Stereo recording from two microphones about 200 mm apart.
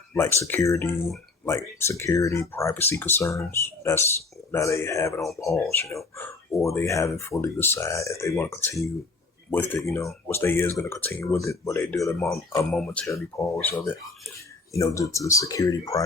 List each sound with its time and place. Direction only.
0.1 s speech: 15° left (ahead or behind)